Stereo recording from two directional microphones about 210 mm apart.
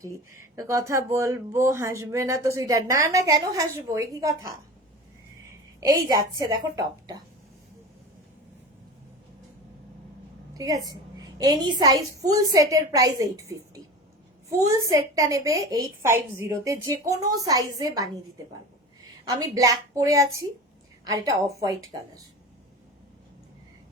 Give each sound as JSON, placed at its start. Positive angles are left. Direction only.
{"t": 0.0, "sound": "speech", "side_deg": -15}
{"t": 5.8, "sound": "speech", "side_deg": -20}
{"t": 10.6, "sound": "speech", "side_deg": -15}
{"t": 14.6, "sound": "speech", "side_deg": -15}
{"t": 19.4, "sound": "speech", "side_deg": -15}